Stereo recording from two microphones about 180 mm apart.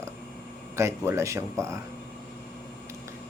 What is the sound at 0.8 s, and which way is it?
Speech, 15° right (ahead or behind).